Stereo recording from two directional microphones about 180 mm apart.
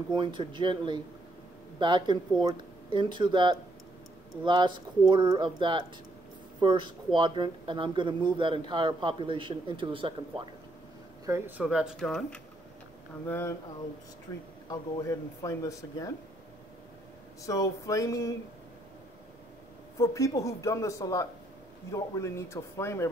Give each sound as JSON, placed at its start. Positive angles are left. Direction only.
{"t": 0.1, "sound": "a man's voice", "side_deg": -25}
{"t": 11.2, "sound": "speech", "side_deg": -15}
{"t": 14.7, "sound": "speech", "side_deg": 20}
{"t": 17.5, "sound": "speech", "side_deg": 15}
{"t": 20.0, "sound": "speech", "side_deg": 15}